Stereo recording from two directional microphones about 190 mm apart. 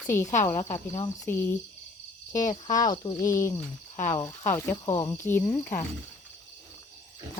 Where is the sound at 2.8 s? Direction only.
20° left (ahead or behind).